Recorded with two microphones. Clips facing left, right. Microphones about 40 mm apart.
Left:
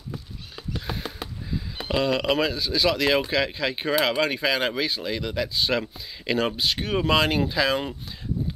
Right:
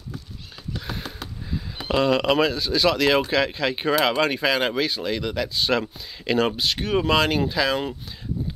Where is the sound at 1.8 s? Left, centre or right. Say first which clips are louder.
Right 3 dB; centre.